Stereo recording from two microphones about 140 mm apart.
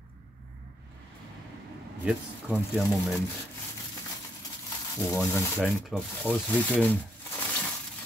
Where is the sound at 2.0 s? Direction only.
5° right (ahead or behind).